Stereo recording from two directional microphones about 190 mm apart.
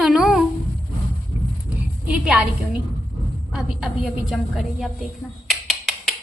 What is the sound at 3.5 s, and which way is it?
A woman's voice, centre (ahead or behind).